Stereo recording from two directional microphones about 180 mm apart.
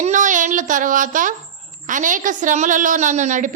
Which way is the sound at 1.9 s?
45° right (ahead or behind).